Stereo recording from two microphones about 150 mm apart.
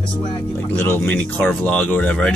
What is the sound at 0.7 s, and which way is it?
Speech, 15° left (ahead or behind).